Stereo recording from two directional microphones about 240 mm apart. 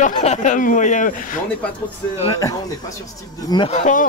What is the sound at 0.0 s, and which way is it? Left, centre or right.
Speech, left.